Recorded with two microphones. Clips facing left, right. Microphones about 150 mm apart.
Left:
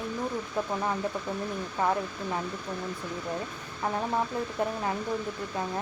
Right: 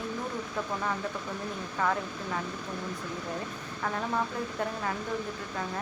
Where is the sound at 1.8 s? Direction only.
25° left (ahead or behind).